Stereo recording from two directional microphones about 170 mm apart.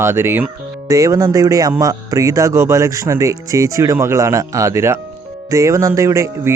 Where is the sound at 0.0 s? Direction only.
15° right (ahead or behind).